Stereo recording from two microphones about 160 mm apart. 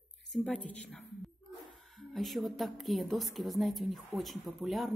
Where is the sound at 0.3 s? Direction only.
5° left (ahead or behind).